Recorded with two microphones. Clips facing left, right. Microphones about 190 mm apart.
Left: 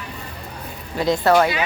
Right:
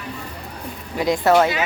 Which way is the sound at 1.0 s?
15° right (ahead or behind).